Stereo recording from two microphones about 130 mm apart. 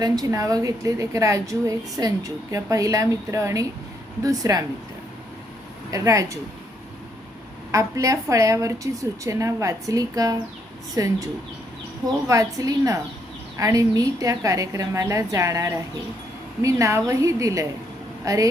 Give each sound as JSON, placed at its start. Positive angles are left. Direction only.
{"t": 0.0, "sound": "a woman's voice", "side_deg": -25}
{"t": 5.9, "sound": "a woman's voice", "side_deg": -25}
{"t": 7.7, "sound": "a woman's voice", "side_deg": -25}
{"t": 12.3, "sound": "a woman's voice", "side_deg": -25}